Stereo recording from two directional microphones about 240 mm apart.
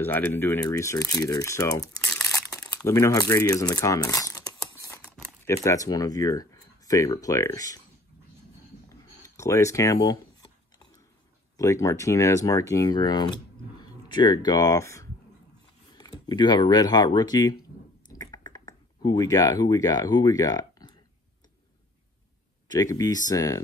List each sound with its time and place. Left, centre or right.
0.0 s speech: centre
8.8 s a sound: centre
11.5 s speech: centre
16.3 s speech: centre
18.0 s a sound: centre
22.7 s speech: centre